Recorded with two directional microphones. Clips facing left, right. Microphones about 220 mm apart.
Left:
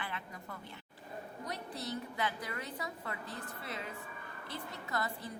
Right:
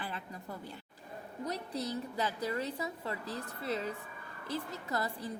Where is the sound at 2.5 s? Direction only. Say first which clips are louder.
Right 6 dB; 35° right (ahead or behind).